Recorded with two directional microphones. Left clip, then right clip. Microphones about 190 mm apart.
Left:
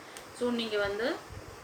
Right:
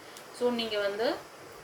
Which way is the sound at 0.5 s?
15° right (ahead or behind).